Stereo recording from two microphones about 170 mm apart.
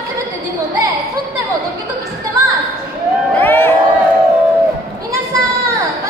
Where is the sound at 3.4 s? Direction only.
10° left (ahead or behind).